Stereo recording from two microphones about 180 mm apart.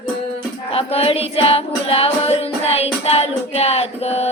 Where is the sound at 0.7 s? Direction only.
35° left (ahead or behind).